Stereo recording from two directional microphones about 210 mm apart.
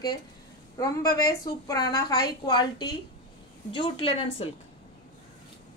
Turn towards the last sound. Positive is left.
turn(degrees=25)  # may be behind; listen again after turning